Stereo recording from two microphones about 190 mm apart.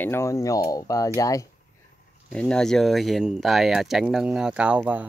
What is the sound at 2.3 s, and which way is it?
Speech, 5° left (ahead or behind).